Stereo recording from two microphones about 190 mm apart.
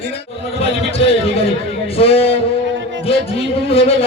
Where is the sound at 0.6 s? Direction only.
30° left (ahead or behind).